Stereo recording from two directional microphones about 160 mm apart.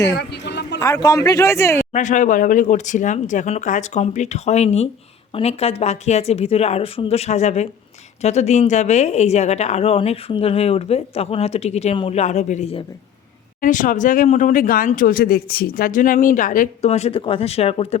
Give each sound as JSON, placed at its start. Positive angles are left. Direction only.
{"t": 0.1, "sound": "a sound", "side_deg": 90}
{"t": 0.8, "sound": "speech", "side_deg": 20}
{"t": 1.9, "sound": "a woman's voice", "side_deg": 50}